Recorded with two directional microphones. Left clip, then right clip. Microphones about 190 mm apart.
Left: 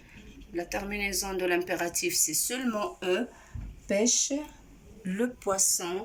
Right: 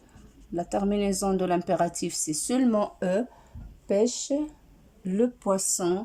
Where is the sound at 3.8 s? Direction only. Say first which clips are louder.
Right 2 dB; 5° right (ahead or behind).